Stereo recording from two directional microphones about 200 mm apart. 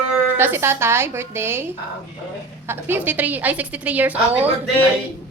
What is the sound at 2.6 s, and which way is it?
Speech, 10° right (ahead or behind).